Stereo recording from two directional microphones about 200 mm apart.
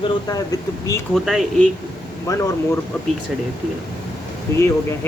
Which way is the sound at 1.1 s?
Centre (ahead or behind).